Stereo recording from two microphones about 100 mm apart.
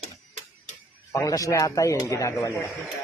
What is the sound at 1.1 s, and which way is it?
Speech, 35° left (ahead or behind).